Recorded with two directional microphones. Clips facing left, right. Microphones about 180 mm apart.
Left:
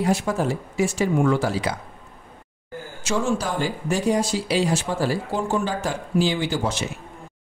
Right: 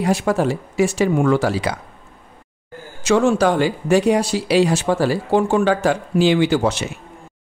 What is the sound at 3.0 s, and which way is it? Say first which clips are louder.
Speech: right 9 dB; 70° right (ahead or behind).